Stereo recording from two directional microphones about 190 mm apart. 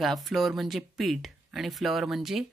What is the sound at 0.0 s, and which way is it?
Speech, centre (ahead or behind).